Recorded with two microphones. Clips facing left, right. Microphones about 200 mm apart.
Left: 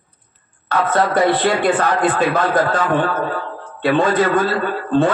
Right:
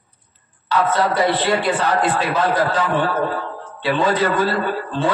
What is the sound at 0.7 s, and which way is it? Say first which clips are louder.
A man's voice: left 1 dB; 50° left (ahead or behind).